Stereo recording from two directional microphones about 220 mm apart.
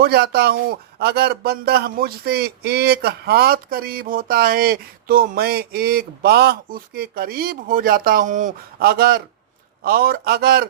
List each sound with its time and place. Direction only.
0.0 s speech: 45° right (ahead or behind)